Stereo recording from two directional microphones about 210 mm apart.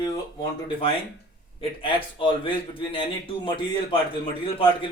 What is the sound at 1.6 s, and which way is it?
A man's voice, 25° left (ahead or behind).